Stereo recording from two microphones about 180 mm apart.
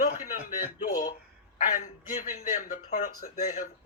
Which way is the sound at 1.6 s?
45° left (ahead or behind).